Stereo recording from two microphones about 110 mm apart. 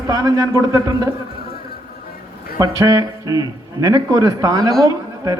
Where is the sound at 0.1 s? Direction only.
30° right (ahead or behind).